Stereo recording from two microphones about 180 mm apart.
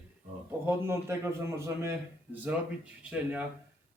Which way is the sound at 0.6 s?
15° right (ahead or behind).